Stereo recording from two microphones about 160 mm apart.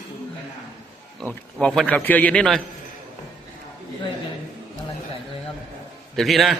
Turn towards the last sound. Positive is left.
turn(degrees=0)  # may be behind; listen again after turning